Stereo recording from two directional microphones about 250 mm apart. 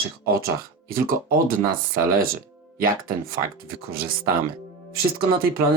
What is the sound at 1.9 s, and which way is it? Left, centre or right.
Speech, right.